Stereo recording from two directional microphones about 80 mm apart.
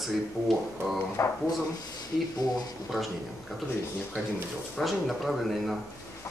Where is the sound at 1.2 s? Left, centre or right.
Left.